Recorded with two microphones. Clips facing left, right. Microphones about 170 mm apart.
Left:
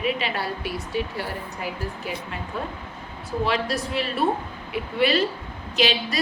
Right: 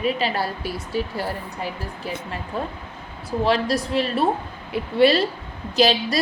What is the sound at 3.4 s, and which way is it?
A woman's voice, 35° right (ahead or behind).